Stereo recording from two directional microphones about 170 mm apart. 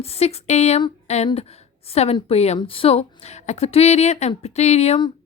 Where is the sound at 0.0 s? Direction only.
35° left (ahead or behind).